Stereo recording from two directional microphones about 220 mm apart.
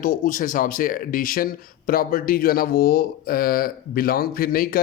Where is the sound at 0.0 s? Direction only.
35° left (ahead or behind).